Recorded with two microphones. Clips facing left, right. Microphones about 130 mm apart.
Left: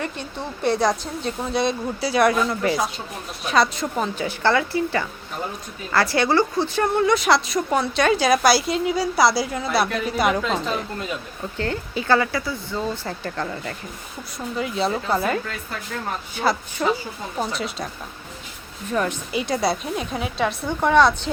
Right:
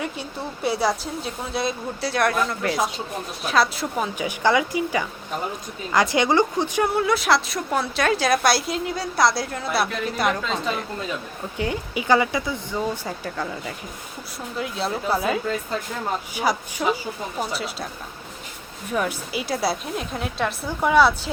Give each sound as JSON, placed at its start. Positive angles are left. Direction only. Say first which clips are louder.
{"t": 0.0, "sound": "a woman's voice", "louder": "even", "side_deg": -5}
{"t": 6.8, "sound": "a woman's voice", "louder": "left 3 dB", "side_deg": -5}
{"t": 11.5, "sound": "a woman's voice", "louder": "even", "side_deg": -15}
{"t": 18.9, "sound": "a woman's voice", "louder": "left 2 dB", "side_deg": -5}